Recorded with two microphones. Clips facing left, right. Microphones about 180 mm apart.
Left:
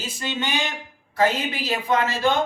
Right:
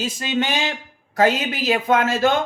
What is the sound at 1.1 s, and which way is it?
Speech, 50° right (ahead or behind).